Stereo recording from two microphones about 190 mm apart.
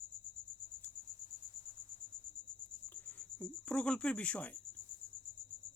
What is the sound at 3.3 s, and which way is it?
Cricket, 5° left (ahead or behind).